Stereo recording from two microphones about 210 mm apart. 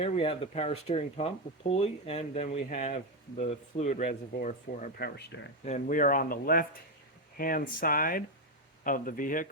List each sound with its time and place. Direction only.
0.0 s speech: 30° left (ahead or behind); by 5.5 s 55° left (ahead or behind)
5.6 s speech: 35° left (ahead or behind)